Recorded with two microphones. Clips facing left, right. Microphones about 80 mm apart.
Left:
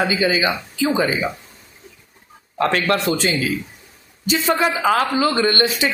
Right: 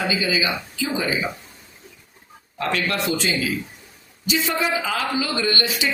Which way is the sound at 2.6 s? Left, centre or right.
Left.